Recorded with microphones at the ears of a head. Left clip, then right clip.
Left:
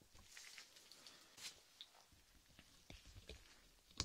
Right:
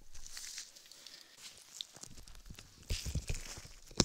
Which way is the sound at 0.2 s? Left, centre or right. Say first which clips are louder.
Right 11 dB; right.